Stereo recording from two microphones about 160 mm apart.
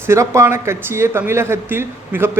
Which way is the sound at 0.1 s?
15° right (ahead or behind).